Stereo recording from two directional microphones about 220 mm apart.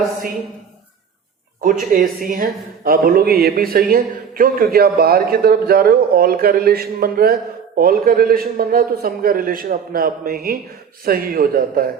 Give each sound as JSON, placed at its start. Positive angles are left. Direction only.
{"t": 1.6, "sound": "a man's voice", "side_deg": -40}